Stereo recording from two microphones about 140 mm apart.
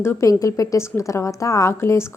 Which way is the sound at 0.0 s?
20° left (ahead or behind).